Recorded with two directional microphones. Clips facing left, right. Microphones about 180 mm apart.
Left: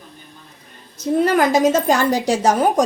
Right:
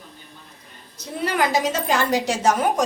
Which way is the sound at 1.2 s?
45° left (ahead or behind).